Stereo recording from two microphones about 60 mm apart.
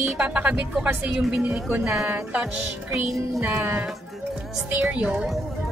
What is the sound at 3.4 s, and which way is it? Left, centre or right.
A woman's voice, right.